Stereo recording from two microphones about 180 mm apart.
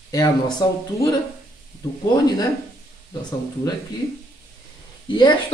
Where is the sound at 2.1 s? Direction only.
20° left (ahead or behind).